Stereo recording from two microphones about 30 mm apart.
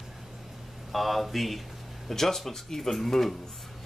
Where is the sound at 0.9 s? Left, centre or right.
Centre.